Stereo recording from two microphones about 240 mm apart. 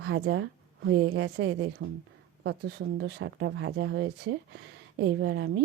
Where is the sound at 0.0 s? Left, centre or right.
Right.